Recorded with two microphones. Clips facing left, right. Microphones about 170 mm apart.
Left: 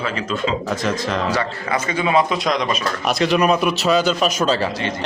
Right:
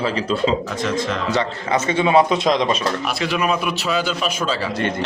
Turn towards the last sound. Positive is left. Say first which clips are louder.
# left 4 dB
turn(degrees=40)  # may be behind; listen again after turning